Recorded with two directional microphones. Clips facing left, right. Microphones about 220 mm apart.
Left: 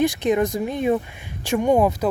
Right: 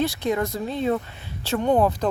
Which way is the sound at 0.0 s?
15° left (ahead or behind).